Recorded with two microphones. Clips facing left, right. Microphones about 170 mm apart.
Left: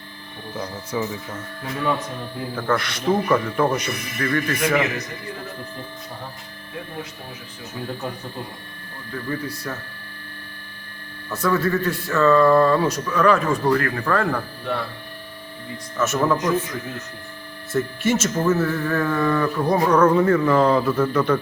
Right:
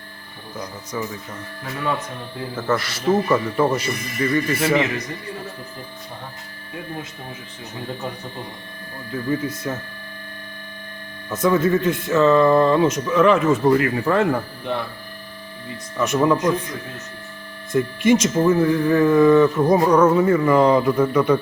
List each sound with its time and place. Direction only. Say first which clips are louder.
0.6 s speech: left 2 dB; 10° left (ahead or behind)
2.6 s a man's voice: right 1 dB; 5° right (ahead or behind)
9.3 s speech: right 5 dB; 20° right (ahead or behind)
11.3 s speech: right 3 dB; 20° right (ahead or behind)
16.0 s speech: right 2 dB; 15° right (ahead or behind)
17.7 s speech: right 4 dB; 15° right (ahead or behind)
20.0 s speech: right 1 dB; 5° right (ahead or behind)